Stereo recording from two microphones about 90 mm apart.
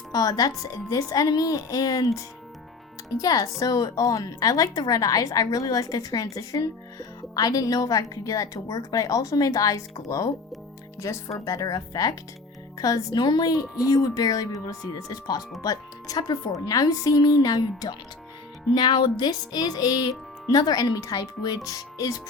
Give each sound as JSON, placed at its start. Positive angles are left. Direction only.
{"t": 0.1, "sound": "a woman's voice", "side_deg": 45}
{"t": 18.7, "sound": "speech", "side_deg": 60}
{"t": 19.2, "sound": "a woman's voice", "side_deg": 45}